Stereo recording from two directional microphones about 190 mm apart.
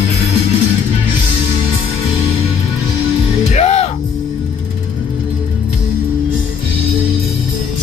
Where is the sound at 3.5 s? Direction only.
35° left (ahead or behind).